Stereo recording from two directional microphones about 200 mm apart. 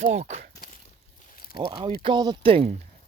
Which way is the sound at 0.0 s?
35° right (ahead or behind).